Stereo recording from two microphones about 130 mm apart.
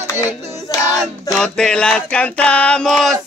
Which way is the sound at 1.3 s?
5° left (ahead or behind).